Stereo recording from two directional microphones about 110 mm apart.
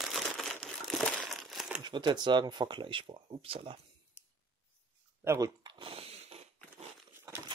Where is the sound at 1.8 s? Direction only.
40° right (ahead or behind); by 3.8 s 55° right (ahead or behind).